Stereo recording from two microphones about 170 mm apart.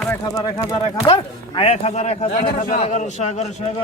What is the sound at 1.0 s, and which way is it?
A man's voice, 35° left (ahead or behind).